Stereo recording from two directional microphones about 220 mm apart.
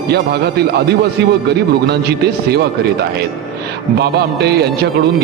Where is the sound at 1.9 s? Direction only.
50° right (ahead or behind).